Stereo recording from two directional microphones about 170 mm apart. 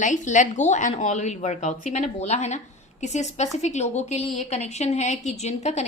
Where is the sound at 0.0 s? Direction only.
45° left (ahead or behind).